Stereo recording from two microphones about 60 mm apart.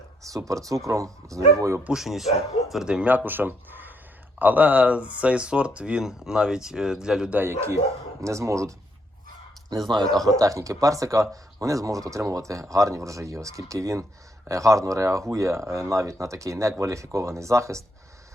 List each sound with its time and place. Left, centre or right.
0.3 s speech: right
1.9 s speech: centre
2.8 s speech: centre
3.2 s speech: right; by 7.3 s centre
7.4 s speech: right
9.8 s speech: centre
10.2 s speech: right